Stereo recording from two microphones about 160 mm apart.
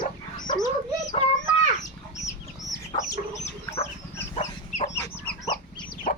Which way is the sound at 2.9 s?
40° left (ahead or behind).